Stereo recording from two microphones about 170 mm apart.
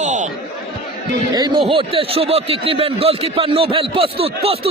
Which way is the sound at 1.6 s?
35° right (ahead or behind).